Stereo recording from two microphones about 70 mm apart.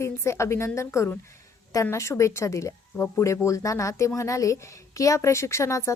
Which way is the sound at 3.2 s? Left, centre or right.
Left.